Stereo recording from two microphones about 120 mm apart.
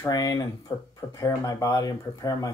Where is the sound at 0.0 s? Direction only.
30° left (ahead or behind).